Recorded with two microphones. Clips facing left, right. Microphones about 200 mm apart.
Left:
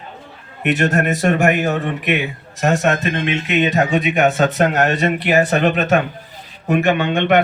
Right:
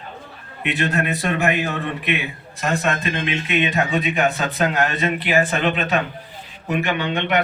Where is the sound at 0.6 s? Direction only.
45° left (ahead or behind).